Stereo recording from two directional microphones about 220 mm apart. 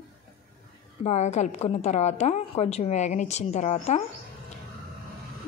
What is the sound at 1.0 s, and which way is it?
A woman's voice, 30° left (ahead or behind).